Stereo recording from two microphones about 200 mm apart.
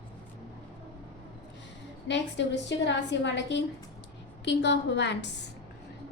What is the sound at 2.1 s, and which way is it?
A woman's voice, 65° left (ahead or behind).